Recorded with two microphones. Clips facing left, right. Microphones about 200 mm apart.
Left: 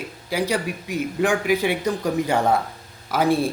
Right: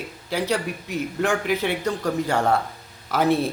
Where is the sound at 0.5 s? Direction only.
5° left (ahead or behind).